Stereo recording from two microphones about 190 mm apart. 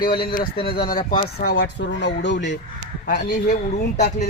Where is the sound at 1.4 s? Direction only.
60° left (ahead or behind).